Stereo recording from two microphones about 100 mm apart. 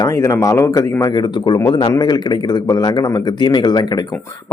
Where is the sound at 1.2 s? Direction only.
45° left (ahead or behind).